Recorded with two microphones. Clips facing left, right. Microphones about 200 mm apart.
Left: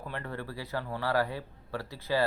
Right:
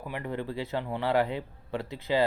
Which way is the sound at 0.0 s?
15° right (ahead or behind).